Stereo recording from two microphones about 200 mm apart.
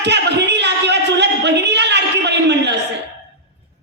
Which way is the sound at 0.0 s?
60° right (ahead or behind).